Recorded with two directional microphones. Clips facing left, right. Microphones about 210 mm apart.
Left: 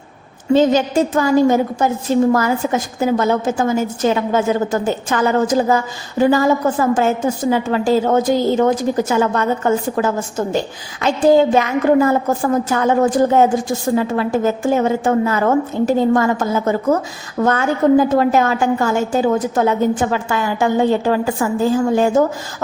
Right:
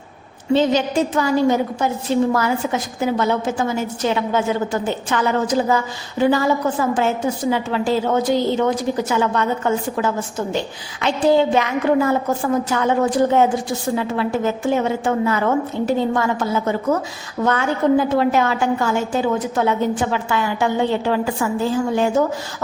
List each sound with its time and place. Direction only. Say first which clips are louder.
0.5 s a woman's voice: left 3 dB; 45° left (ahead or behind)